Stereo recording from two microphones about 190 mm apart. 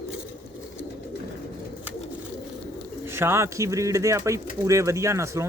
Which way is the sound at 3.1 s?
15° right (ahead or behind).